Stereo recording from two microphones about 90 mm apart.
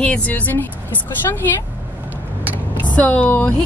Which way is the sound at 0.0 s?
15° left (ahead or behind).